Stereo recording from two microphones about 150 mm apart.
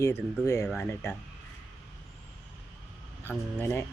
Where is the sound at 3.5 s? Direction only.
15° left (ahead or behind).